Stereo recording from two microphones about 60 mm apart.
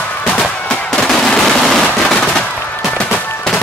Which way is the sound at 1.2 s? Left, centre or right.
Centre.